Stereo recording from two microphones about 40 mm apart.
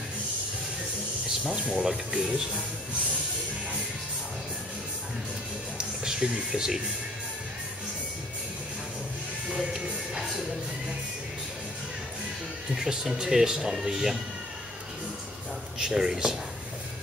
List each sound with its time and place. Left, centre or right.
1.6 s speech: right
5.8 s music: centre
6.5 s speech: centre
9.5 s music: centre
12.7 s speech: centre
15.8 s speech: centre